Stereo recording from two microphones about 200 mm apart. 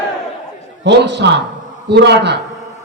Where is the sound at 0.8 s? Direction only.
60° right (ahead or behind).